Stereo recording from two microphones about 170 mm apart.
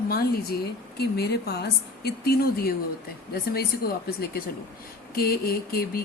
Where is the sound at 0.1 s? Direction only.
65° left (ahead or behind).